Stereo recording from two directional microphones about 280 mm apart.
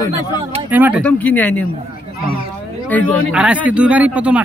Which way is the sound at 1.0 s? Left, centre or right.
Centre.